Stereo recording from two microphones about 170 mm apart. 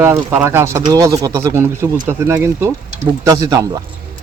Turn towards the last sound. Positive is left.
turn(degrees=-20)  # may be behind; listen again after turning